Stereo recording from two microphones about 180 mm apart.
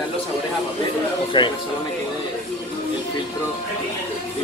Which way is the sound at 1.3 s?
25° left (ahead or behind).